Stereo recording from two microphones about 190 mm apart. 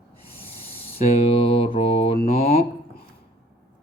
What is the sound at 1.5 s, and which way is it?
Mantra, 30° left (ahead or behind).